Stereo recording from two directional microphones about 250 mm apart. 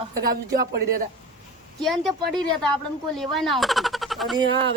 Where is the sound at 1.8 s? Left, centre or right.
Centre.